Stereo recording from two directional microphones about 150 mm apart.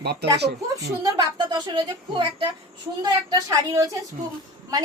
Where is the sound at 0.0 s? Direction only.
90° right.